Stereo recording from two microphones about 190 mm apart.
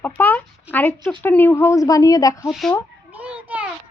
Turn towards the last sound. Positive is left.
turn(degrees=-5)  # may be behind; listen again after turning